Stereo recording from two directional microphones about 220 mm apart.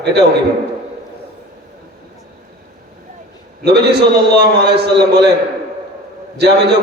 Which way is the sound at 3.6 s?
50° right (ahead or behind).